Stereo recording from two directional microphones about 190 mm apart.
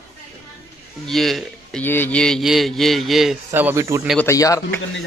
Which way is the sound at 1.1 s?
Centre (ahead or behind).